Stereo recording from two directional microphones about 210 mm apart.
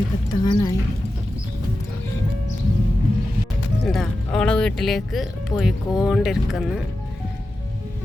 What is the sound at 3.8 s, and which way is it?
Speech, 5° left (ahead or behind).